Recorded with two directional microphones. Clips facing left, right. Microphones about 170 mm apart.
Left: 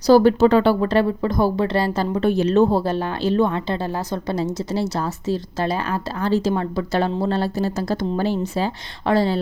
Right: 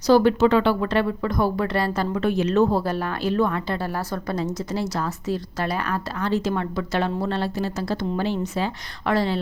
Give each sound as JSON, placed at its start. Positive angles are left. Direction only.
{"t": 0.0, "sound": "speech", "side_deg": 35}